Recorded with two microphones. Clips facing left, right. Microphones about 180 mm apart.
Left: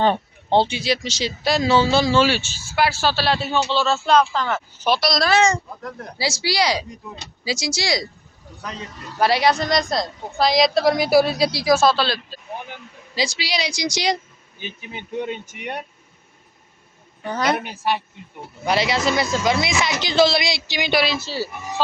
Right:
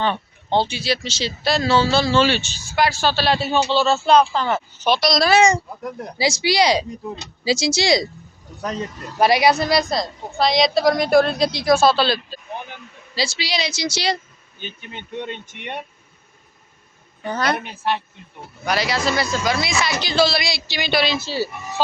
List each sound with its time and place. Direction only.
0.5 s speech: 25° left (ahead or behind); by 3.3 s 5° left (ahead or behind)
3.5 s speech: 10° right (ahead or behind)
4.2 s speech: 25° right (ahead or behind)
4.8 s speech: 5° left (ahead or behind)
5.3 s speech: 15° right (ahead or behind)
9.1 s speech: 15° right (ahead or behind)
13.1 s speech: 15° left (ahead or behind)
14.6 s speech: 5° left (ahead or behind)
17.5 s speech: 5° left (ahead or behind)
18.6 s speech: 25° left (ahead or behind)
21.1 s speech: centre (ahead or behind)